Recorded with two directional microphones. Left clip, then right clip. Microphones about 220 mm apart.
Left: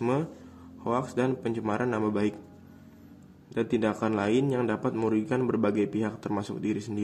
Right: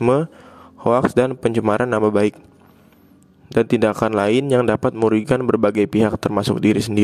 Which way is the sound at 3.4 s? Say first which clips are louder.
Right 11 dB; 50° right (ahead or behind).